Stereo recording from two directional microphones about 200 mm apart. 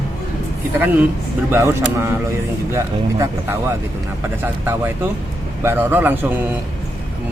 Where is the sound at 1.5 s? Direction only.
15° right (ahead or behind).